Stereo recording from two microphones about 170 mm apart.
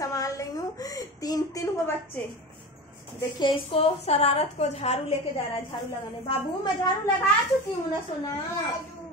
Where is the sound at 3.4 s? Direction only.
35° left (ahead or behind).